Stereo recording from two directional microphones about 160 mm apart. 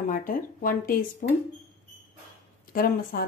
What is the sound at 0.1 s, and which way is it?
A woman's voice, 55° left (ahead or behind).